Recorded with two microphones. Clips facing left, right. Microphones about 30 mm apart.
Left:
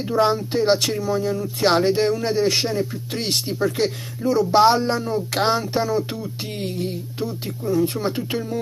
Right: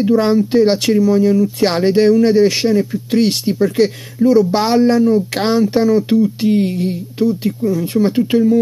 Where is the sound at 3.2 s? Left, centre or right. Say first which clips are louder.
Right 9 dB; right.